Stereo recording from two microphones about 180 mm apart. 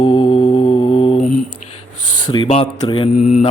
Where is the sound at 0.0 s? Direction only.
25° left (ahead or behind).